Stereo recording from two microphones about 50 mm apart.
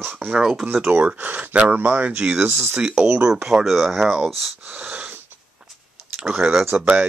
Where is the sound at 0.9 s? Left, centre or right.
Right.